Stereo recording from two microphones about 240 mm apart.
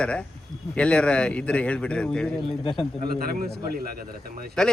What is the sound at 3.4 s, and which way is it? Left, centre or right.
Speech, right.